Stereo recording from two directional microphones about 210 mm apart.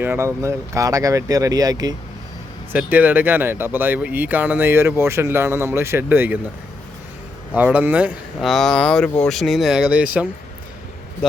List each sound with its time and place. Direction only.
0.0 s speech: 10° right (ahead or behind)
7.5 s speech: 10° right (ahead or behind)